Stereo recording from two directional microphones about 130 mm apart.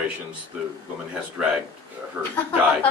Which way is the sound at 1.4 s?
10° right (ahead or behind).